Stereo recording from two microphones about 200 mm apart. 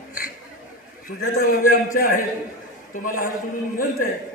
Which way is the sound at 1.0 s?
45° left (ahead or behind).